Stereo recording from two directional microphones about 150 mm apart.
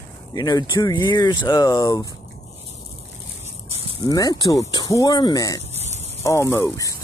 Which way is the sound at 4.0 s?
25° left (ahead or behind).